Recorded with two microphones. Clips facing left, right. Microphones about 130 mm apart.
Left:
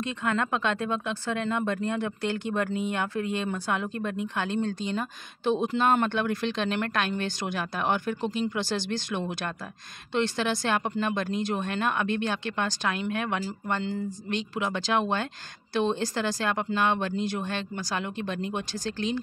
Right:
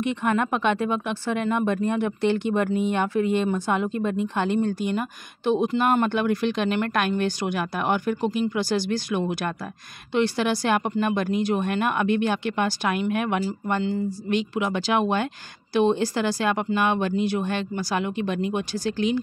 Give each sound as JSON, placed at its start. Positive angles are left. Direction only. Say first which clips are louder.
{"t": 0.0, "sound": "speech", "louder": "right 5 dB", "side_deg": -20}